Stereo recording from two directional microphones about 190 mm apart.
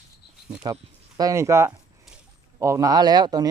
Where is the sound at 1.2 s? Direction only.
15° right (ahead or behind).